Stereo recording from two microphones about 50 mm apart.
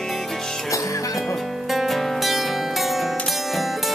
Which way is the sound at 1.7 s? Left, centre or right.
Centre.